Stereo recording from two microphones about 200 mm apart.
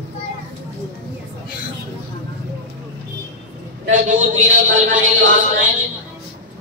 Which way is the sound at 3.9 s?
40° right (ahead or behind).